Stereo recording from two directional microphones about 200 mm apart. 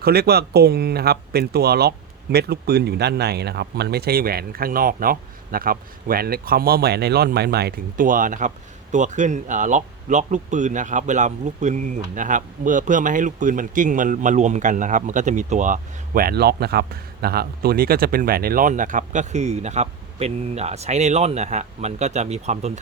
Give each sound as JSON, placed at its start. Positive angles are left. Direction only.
{"t": 0.0, "sound": "speech", "side_deg": -50}